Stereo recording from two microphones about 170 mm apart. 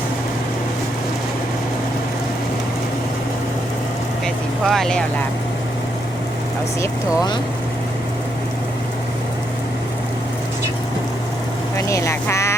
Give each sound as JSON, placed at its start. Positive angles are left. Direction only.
{"t": 4.6, "sound": "speech", "side_deg": 0}
{"t": 11.9, "sound": "speech", "side_deg": 15}